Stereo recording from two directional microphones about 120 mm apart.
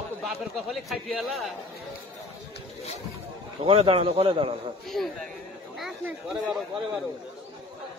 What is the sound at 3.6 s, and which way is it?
A man's voice, 50° right (ahead or behind).